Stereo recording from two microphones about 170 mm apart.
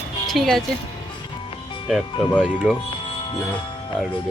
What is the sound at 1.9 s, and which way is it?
Speech, centre (ahead or behind).